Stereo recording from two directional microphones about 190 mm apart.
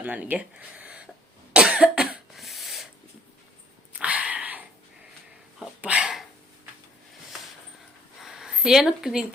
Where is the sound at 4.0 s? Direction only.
5° right (ahead or behind).